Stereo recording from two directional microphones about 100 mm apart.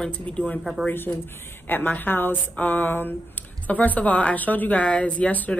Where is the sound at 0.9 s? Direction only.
20° left (ahead or behind).